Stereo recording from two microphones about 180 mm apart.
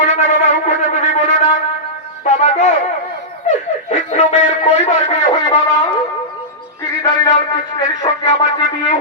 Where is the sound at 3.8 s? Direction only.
40° left (ahead or behind).